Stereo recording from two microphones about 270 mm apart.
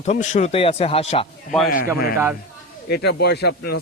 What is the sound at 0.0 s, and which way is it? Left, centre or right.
Speech, left.